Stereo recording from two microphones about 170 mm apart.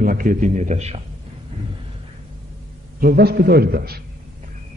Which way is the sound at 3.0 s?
60° right (ahead or behind).